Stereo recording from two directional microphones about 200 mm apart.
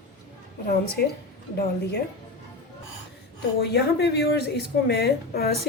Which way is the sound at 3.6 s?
55° left (ahead or behind).